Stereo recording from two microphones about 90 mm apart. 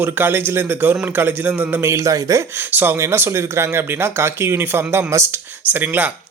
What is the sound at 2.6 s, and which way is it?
Speech, 25° right (ahead or behind).